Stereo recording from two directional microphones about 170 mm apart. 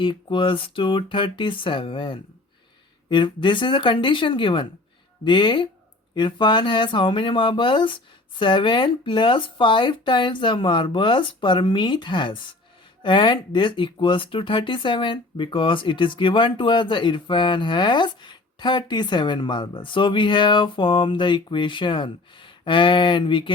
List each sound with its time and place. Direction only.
0.0 s speech: 30° left (ahead or behind)